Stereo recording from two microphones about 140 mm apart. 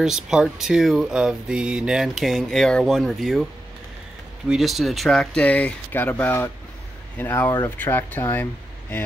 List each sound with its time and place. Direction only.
0.0 s speech: 5° right (ahead or behind)
4.5 s speech: centre (ahead or behind)